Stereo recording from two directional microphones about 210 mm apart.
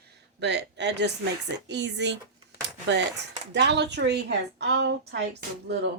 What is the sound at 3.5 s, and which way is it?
Speech, 55° right (ahead or behind).